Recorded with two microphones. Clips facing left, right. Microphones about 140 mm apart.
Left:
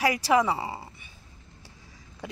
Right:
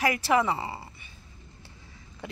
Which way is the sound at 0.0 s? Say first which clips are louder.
Left 1 dB; 10° left (ahead or behind).